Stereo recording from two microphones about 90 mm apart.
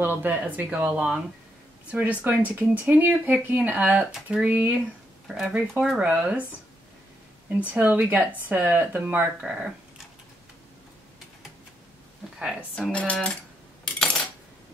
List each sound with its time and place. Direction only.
0.0 s speech: 20° right (ahead or behind)
7.4 s speech: 20° right (ahead or behind)
12.4 s a woman's voice: 10° right (ahead or behind)
12.9 s cutlery: 15° left (ahead or behind)
13.9 s coin: 5° left (ahead or behind)